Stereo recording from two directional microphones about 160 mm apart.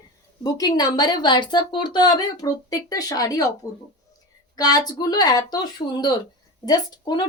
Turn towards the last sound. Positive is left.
turn(degrees=25)  # may be behind; listen again after turning